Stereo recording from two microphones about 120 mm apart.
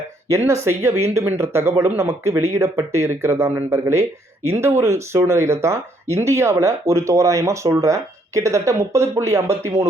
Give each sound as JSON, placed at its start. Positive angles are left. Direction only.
{"t": 0.3, "sound": "speech", "side_deg": -25}